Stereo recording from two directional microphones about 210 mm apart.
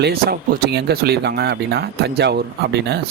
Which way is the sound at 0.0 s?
45° right (ahead or behind).